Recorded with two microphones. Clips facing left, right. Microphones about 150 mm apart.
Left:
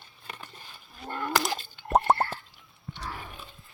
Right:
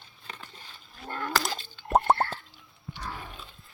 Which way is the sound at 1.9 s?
Centre (ahead or behind).